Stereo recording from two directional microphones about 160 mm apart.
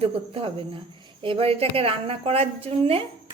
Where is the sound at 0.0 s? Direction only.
35° right (ahead or behind).